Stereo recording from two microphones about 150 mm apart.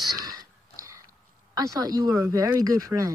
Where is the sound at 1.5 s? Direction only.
25° right (ahead or behind).